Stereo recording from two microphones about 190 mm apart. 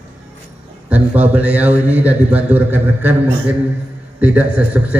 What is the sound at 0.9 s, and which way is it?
A man's voice, 10° right (ahead or behind).